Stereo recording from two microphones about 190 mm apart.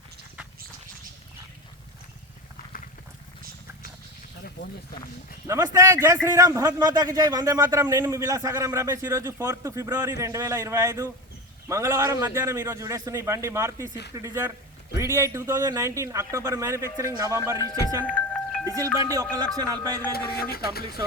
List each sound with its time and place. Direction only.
5.5 s speech: 15° right (ahead or behind)
17.6 s speech: 20° left (ahead or behind)
18.1 s wind chime: 10° left (ahead or behind)
19.5 s speech: 20° right (ahead or behind)
20.1 s speech: 55° left (ahead or behind)